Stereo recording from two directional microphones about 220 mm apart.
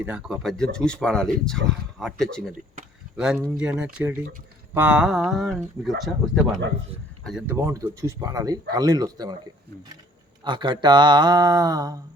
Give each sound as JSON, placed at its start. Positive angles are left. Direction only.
{"t": 0.0, "sound": "speech", "side_deg": -5}
{"t": 10.4, "sound": "speech", "side_deg": -20}